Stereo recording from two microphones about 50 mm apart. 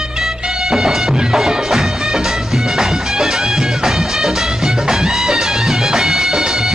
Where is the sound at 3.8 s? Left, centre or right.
Centre.